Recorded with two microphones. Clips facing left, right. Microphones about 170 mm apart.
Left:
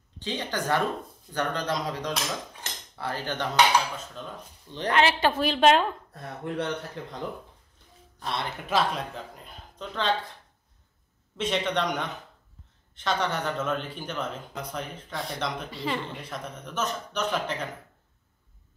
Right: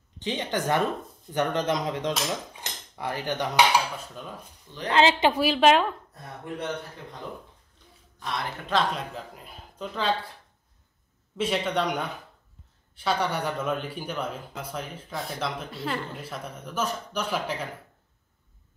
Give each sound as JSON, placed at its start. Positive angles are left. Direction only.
{"t": 0.2, "sound": "speech", "side_deg": -20}
{"t": 2.6, "sound": "cutlery", "side_deg": -15}
{"t": 4.8, "sound": "speech", "side_deg": -20}
{"t": 5.4, "sound": "speech", "side_deg": -5}
{"t": 7.0, "sound": "speech", "side_deg": 90}
{"t": 8.2, "sound": "a man's voice", "side_deg": 30}
{"t": 8.6, "sound": "speech", "side_deg": 5}
{"t": 11.3, "sound": "speech", "side_deg": -5}